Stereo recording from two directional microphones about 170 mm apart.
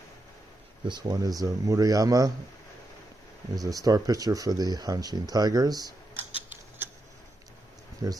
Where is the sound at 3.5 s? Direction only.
20° right (ahead or behind).